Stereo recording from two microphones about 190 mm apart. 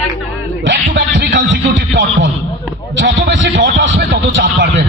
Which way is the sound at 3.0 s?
75° right (ahead or behind).